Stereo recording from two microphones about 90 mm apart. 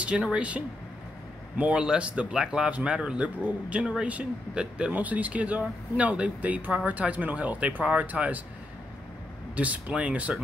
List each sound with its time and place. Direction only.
0.0 s speech: 10° right (ahead or behind)
9.6 s speech: 15° right (ahead or behind)